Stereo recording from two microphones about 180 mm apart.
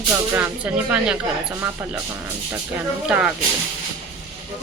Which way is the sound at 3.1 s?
5° right (ahead or behind).